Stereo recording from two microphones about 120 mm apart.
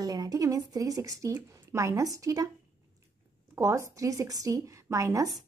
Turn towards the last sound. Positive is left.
turn(degrees=-30)  # may be behind; listen again after turning